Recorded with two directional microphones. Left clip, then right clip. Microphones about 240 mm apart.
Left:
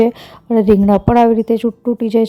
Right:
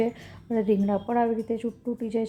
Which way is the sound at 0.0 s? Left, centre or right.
Left.